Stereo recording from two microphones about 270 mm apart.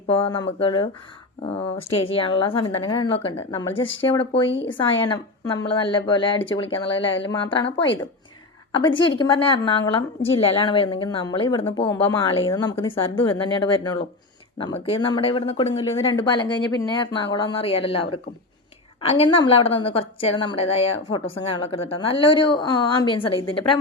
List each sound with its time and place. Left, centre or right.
0.1 s a woman's voice: centre
4.4 s a woman's voice: left
4.8 s a woman's voice: centre
8.7 s a woman's voice: centre